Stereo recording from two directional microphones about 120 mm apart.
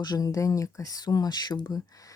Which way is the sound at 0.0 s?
30° left (ahead or behind).